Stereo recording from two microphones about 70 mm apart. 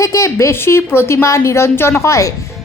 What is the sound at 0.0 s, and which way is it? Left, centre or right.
A woman's voice, left.